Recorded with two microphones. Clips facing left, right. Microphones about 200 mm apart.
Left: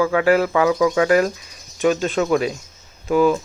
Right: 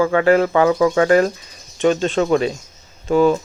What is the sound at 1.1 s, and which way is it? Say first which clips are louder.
Speech: right 2 dB; 5° left (ahead or behind).